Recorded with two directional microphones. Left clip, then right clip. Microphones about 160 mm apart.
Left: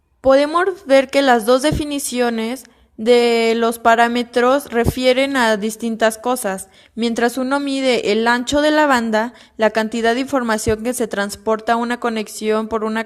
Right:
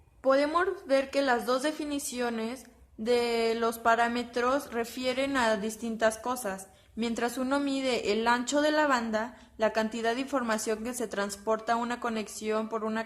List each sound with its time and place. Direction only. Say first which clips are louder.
0.2 s a woman's voice: left 12 dB; 40° left (ahead or behind)